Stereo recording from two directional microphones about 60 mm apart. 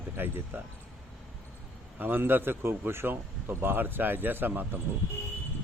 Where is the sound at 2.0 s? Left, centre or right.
Right.